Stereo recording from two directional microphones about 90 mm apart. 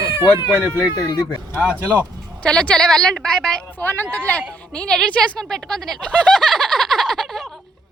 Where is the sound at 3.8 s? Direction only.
20° left (ahead or behind).